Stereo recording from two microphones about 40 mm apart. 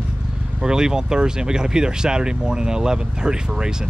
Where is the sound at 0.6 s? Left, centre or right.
Centre.